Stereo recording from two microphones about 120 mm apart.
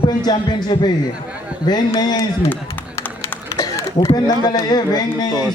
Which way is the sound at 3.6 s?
30° left (ahead or behind).